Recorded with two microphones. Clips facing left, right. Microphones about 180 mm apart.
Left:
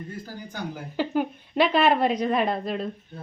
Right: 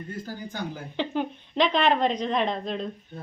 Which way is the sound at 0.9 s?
10° left (ahead or behind).